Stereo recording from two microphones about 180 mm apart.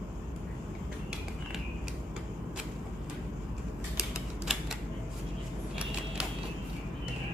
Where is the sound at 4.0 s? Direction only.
Centre (ahead or behind).